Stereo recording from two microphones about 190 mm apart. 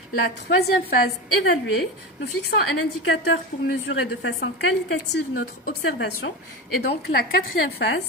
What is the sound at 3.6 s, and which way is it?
A woman's voice, 65° left (ahead or behind).